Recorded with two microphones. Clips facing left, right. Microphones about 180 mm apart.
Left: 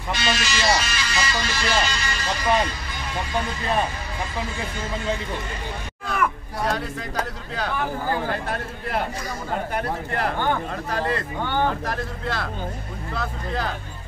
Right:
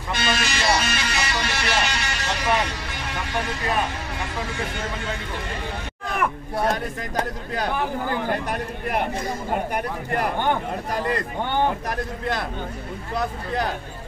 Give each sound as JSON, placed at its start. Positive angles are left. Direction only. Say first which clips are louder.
{"t": 0.1, "sound": "speech", "louder": "even", "side_deg": -55}
{"t": 8.3, "sound": "speech", "louder": "right 2 dB", "side_deg": -15}
{"t": 10.1, "sound": "speech", "louder": "right 2 dB", "side_deg": -15}